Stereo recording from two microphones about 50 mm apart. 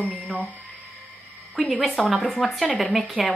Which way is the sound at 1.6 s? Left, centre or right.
Centre.